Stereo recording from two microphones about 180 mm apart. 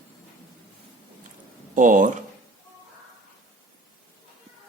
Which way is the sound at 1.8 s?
45° right (ahead or behind).